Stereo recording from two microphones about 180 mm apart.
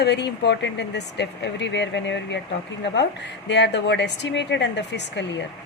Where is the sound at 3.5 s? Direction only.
75° left (ahead or behind).